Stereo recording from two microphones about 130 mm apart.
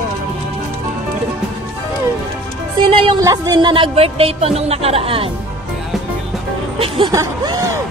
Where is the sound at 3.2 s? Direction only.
30° right (ahead or behind); by 5.3 s 45° right (ahead or behind).